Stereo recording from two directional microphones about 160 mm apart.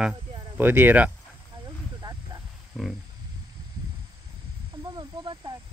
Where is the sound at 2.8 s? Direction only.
Centre (ahead or behind).